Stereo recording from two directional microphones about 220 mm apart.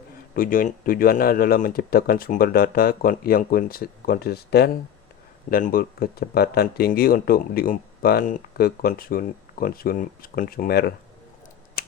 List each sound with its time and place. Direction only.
0.3 s speech: 40° left (ahead or behind)
11.8 s scissors: 45° left (ahead or behind)